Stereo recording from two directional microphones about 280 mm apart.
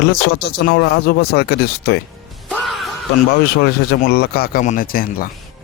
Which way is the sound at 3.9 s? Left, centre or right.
Left.